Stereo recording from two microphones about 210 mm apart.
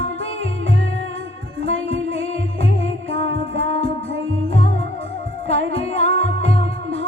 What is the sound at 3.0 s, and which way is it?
Music, 60° right (ahead or behind).